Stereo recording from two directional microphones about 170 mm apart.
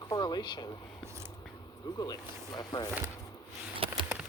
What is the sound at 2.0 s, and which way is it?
Speech, 20° left (ahead or behind).